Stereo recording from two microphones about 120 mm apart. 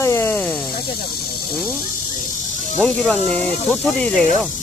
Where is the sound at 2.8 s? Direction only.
5° left (ahead or behind).